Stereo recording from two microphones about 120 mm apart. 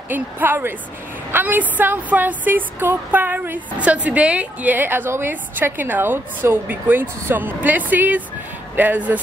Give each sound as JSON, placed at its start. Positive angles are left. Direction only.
{"t": 0.1, "sound": "a woman's voice", "side_deg": -15}